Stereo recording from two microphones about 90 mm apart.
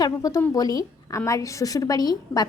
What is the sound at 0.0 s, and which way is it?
A woman's voice, 45° left (ahead or behind).